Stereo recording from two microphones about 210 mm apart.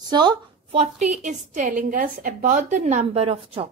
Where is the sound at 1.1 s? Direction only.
35° right (ahead or behind).